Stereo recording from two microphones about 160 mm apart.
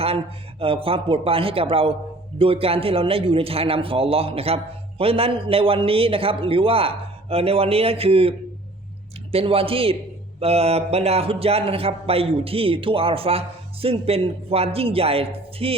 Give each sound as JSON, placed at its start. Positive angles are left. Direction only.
{"t": 0.6, "sound": "a man's voice", "side_deg": -35}